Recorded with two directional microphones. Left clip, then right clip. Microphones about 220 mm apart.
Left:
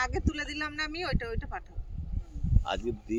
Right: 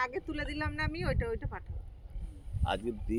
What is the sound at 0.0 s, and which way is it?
Speech, 20° left (ahead or behind).